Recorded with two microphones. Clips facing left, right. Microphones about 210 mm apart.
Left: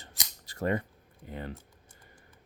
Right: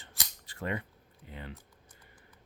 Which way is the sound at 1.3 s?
45° left (ahead or behind).